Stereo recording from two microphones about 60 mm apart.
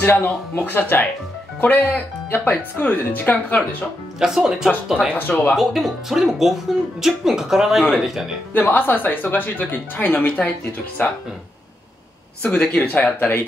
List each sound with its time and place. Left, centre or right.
0.0 s speech: left
4.2 s speech: centre
5.1 s speech: left
5.6 s speech: centre
8.5 s speech: left
12.4 s speech: centre
12.7 s speech: left